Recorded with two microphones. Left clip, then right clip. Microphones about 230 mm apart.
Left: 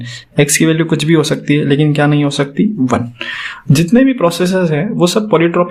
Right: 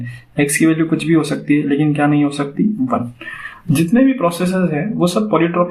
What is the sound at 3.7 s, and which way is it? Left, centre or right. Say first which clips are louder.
Speech: left 3 dB; left.